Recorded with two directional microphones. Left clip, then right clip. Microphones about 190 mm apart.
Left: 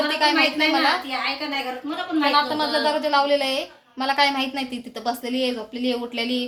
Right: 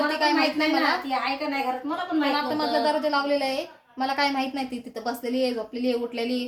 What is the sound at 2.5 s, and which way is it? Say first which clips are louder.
A woman's voice: left 2 dB; 5° left (ahead or behind).